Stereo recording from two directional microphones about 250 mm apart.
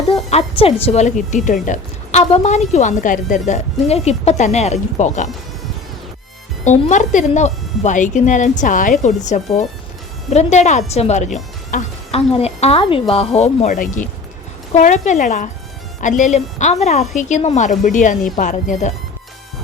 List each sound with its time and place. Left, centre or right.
0.1 s a woman's voice: left
6.7 s a woman's voice: left